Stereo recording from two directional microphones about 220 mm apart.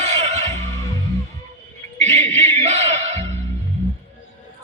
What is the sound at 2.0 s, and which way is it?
Music, 30° right (ahead or behind).